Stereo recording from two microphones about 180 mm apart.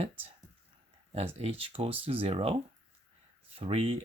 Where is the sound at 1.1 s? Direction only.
35° right (ahead or behind).